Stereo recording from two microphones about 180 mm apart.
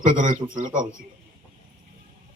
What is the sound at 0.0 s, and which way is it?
Speech, 45° right (ahead or behind).